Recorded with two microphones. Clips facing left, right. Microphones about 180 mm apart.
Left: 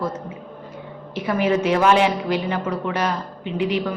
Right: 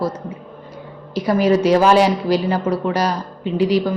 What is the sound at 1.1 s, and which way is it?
A woman's voice, 35° right (ahead or behind).